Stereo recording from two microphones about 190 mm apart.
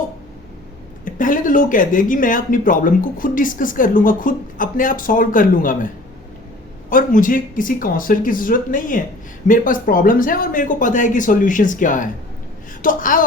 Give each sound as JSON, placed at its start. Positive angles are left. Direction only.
{"t": 1.0, "sound": "speech", "side_deg": 45}
{"t": 6.9, "sound": "speech", "side_deg": 45}